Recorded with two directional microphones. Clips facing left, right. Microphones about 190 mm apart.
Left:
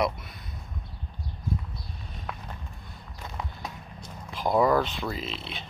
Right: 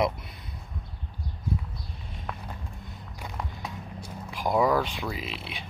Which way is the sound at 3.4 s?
5° right (ahead or behind).